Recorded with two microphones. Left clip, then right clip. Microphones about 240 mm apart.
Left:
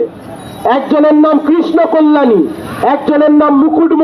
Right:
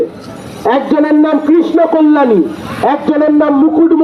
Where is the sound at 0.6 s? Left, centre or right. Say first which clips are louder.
Left 2 dB; left.